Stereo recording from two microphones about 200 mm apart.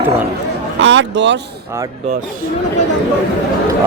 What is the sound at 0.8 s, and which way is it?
Speech, 65° right (ahead or behind).